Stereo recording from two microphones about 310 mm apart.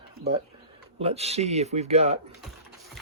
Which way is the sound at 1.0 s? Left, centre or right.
Centre.